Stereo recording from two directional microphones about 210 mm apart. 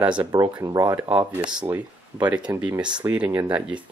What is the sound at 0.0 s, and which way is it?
Speech, 10° right (ahead or behind).